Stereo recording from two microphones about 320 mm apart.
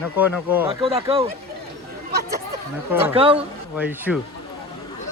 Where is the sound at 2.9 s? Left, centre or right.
Centre.